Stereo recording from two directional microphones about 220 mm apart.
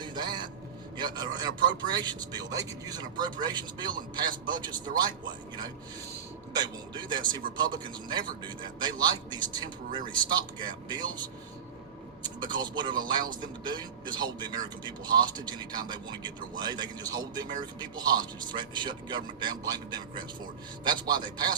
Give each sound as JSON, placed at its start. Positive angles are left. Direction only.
{"t": 0.0, "sound": "a sound", "side_deg": -20}
{"t": 0.9, "sound": "speech", "side_deg": -20}
{"t": 12.5, "sound": "speech", "side_deg": -20}